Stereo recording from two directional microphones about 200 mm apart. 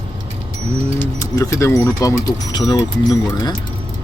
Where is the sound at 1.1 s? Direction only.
15° left (ahead or behind).